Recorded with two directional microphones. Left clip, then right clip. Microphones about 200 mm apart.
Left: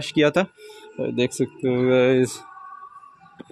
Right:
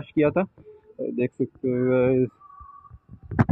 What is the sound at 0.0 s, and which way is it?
Speech, 15° left (ahead or behind).